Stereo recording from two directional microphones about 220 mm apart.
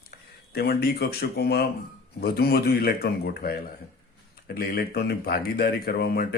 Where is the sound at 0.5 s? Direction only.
45° left (ahead or behind).